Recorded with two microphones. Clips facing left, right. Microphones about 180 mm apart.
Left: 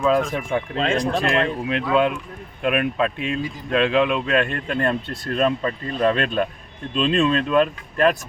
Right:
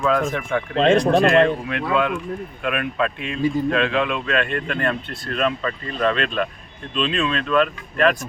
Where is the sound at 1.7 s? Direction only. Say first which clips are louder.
Left 2 dB; 30° left (ahead or behind).